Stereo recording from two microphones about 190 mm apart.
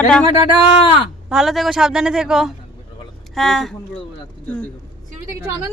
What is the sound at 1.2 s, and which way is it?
A woman's voice, 5° right (ahead or behind).